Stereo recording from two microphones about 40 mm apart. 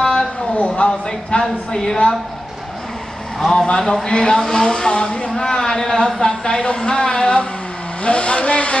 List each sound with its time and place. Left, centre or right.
0.0 s a sound: centre
0.8 s speech: left
3.3 s speech: centre; by 8.7 s left